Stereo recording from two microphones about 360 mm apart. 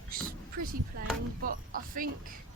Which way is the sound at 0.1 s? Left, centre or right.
Right.